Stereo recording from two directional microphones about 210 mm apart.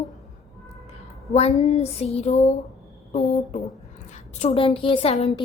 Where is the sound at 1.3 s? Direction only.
30° left (ahead or behind).